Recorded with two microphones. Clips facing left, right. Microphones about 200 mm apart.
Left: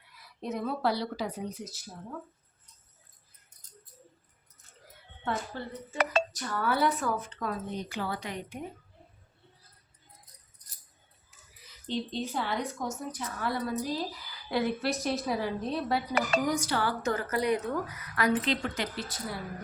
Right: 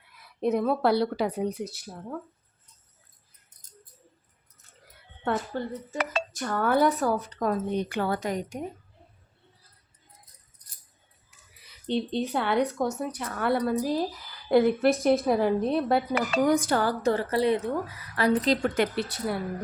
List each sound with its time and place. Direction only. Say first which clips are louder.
0.4 s a woman's voice: right 7 dB; 55° right (ahead or behind)
5.2 s speech: right 6 dB; 50° right (ahead or behind)
7.7 s speech: right 7 dB; 60° right (ahead or behind); by 8.6 s 45° right (ahead or behind)
11.9 s a woman's voice: right 6 dB; 65° right (ahead or behind)